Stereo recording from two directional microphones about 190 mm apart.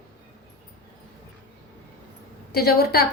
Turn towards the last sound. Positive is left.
turn(degrees=55)  # may be behind; listen again after turning